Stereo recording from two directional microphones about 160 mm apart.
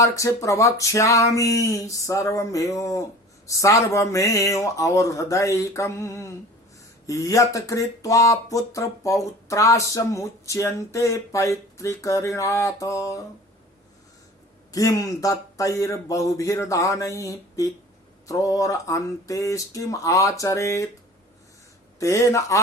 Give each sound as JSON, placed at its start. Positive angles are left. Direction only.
{"t": 0.0, "sound": "speech", "side_deg": 20}
{"t": 14.7, "sound": "speech", "side_deg": 20}
{"t": 21.9, "sound": "speech", "side_deg": 20}